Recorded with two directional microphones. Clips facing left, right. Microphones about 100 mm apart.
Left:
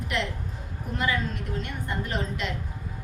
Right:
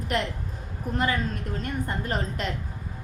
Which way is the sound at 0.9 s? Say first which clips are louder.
Right 1 dB; 40° right (ahead or behind).